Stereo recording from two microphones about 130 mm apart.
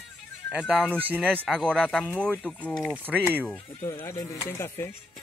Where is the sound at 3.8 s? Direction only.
20° left (ahead or behind).